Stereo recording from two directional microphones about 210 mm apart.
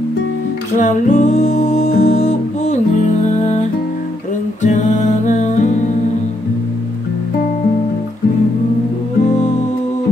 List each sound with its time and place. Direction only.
0.7 s music: 35° left (ahead or behind)
4.6 s music: 35° left (ahead or behind)